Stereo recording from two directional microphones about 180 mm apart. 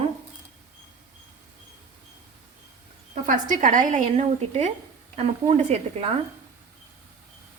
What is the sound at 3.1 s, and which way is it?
A woman's voice, 45° right (ahead or behind).